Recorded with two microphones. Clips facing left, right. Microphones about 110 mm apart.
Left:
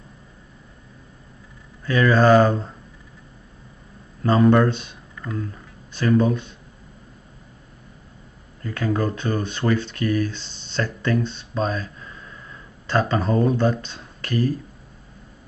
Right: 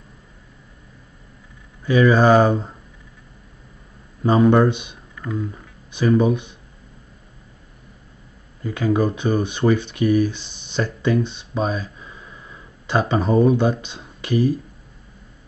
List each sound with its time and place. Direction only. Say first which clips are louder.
1.9 s speech: right 2 dB; 15° right (ahead or behind)
4.2 s speech: right 1 dB; 15° right (ahead or behind)
8.6 s speech: right 4 dB; 15° right (ahead or behind)